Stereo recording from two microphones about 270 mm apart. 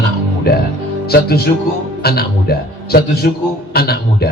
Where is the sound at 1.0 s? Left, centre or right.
Left.